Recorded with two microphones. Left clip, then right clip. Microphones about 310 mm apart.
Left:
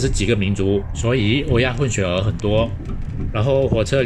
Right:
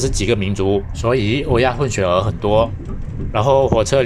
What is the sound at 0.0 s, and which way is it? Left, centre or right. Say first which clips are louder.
Speech: right 2 dB; centre.